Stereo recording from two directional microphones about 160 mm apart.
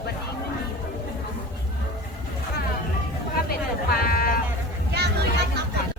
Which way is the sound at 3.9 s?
70° left (ahead or behind).